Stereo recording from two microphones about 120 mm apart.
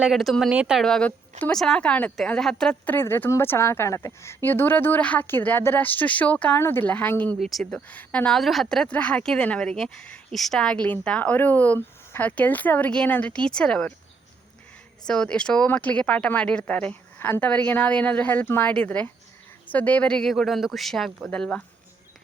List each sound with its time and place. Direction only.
0.0 s speech: centre (ahead or behind)
0.8 s a woman's voice: 5° left (ahead or behind)
7.3 s a woman's voice: centre (ahead or behind)
15.0 s a woman's voice: 5° left (ahead or behind)